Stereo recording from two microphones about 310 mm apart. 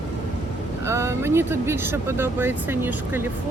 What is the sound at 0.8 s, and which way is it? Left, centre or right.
Speech, centre.